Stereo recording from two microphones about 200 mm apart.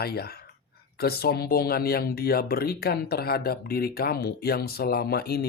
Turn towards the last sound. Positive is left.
turn(degrees=50)  # may be behind; listen again after turning